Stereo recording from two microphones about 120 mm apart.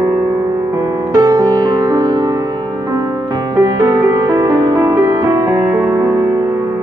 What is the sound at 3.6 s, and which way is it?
Music, 30° right (ahead or behind).